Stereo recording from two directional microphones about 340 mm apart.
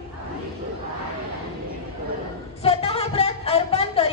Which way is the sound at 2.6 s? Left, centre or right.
Centre.